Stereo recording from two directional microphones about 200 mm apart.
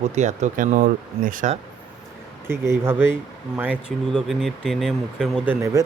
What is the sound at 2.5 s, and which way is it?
Speech, 10° right (ahead or behind).